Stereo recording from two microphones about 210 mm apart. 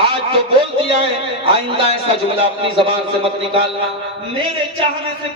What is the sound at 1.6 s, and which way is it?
A man's voice, 25° right (ahead or behind).